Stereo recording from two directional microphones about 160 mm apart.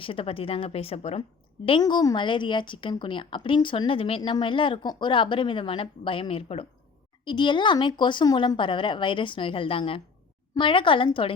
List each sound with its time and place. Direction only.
0.0 s a woman's voice: 35° left (ahead or behind)
1.6 s a woman's voice: 30° left (ahead or behind)